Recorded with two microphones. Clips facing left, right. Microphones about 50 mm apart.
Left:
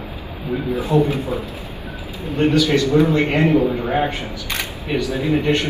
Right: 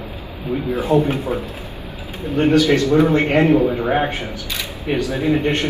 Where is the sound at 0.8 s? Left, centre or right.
Right.